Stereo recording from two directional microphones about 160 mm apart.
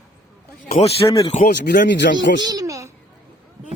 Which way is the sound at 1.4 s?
90° left.